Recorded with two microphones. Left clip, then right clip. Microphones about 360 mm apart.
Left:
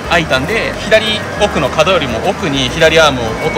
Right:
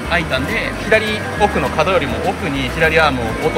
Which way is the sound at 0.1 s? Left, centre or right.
Centre.